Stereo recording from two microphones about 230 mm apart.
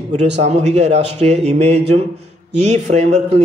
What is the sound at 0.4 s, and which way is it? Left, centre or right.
A man's voice, right.